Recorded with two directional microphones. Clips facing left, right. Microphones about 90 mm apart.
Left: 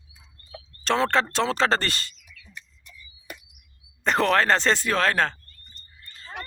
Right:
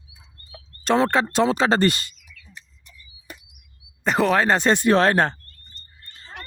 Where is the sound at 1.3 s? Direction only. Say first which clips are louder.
Right 4 dB; 15° right (ahead or behind).